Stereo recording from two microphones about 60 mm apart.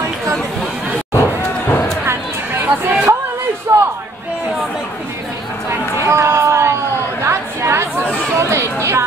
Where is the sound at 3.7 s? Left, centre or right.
Right.